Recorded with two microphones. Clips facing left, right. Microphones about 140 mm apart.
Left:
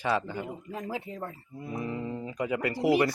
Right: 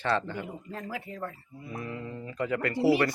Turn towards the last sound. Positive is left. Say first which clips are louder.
# even
turn(degrees=20)  # may be behind; listen again after turning